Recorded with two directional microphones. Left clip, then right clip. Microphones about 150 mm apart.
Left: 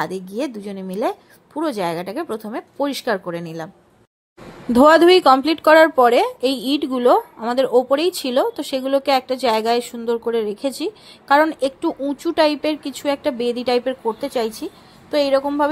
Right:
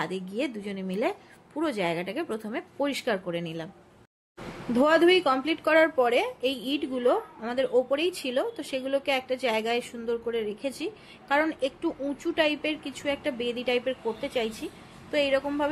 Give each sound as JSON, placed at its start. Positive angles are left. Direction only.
{"t": 0.0, "sound": "a woman's voice", "side_deg": 35}
{"t": 4.7, "sound": "speech", "side_deg": 55}